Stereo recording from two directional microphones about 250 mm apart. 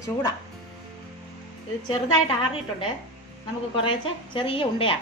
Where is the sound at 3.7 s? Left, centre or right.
Left.